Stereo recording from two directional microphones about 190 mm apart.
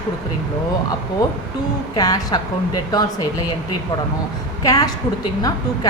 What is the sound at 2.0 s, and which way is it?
Speech, 20° left (ahead or behind).